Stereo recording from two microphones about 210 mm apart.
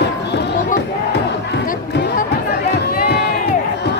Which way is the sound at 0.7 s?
55° left (ahead or behind).